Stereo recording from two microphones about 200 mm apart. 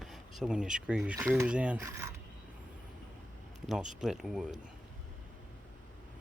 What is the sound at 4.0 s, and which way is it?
Speech, centre (ahead or behind).